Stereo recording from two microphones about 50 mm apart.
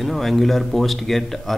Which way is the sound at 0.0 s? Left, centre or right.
Centre.